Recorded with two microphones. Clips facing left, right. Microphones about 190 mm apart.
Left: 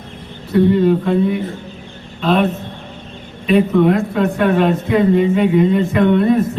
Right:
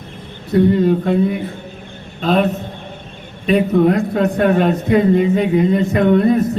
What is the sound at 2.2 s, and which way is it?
A man's voice, 40° right (ahead or behind).